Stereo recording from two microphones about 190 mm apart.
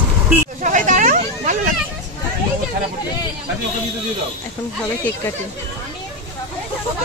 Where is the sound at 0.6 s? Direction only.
40° right (ahead or behind).